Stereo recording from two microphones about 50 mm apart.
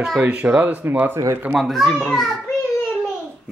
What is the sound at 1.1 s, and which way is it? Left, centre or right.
Speech, right.